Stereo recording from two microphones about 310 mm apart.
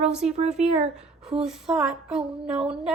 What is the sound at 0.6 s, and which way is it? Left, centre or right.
Speech, centre.